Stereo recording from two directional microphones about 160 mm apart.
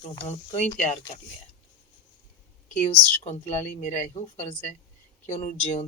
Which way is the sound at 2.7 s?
45° left (ahead or behind).